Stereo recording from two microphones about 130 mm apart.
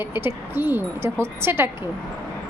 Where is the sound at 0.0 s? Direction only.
15° right (ahead or behind).